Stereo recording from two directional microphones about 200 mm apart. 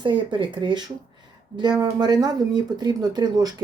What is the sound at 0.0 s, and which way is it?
A woman's voice, 25° right (ahead or behind).